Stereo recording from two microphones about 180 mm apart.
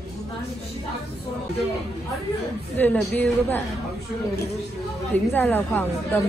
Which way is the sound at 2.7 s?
10° left (ahead or behind).